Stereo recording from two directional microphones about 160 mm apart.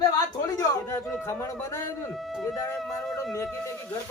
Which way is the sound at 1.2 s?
15° left (ahead or behind).